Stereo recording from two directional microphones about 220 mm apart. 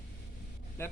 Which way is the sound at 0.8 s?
10° left (ahead or behind).